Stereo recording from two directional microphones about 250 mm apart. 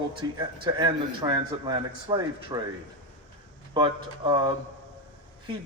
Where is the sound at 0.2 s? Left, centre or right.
Centre.